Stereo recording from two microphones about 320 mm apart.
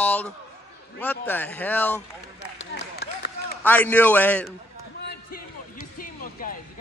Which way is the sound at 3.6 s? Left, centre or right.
Centre.